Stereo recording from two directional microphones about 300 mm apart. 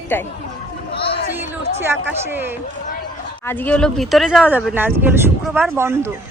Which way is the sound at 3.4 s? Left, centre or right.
Centre.